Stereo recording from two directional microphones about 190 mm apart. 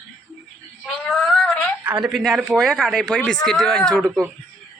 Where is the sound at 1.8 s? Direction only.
5° right (ahead or behind).